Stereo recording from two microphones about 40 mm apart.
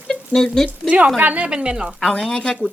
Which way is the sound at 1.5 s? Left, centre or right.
Right.